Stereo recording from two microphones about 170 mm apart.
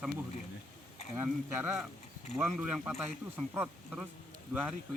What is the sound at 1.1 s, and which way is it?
Speech, 10° right (ahead or behind).